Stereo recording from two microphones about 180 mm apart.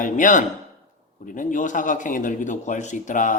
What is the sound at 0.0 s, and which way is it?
A man's voice, 45° left (ahead or behind).